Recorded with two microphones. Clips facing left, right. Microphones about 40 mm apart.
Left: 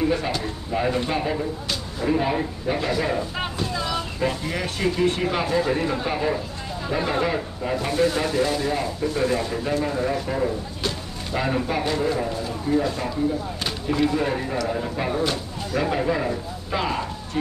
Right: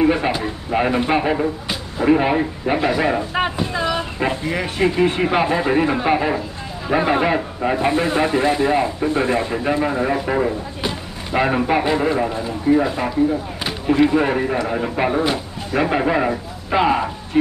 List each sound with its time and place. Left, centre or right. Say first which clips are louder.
0.0 s a man's voice: right 6 dB; right